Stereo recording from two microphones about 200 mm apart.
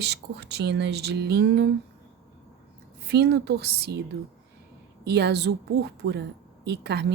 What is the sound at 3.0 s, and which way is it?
Speech, 55° right (ahead or behind).